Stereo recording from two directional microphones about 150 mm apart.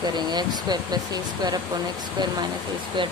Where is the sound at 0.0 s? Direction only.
30° right (ahead or behind).